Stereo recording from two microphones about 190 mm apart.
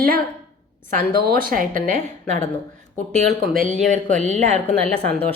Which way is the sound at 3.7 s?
40° right (ahead or behind).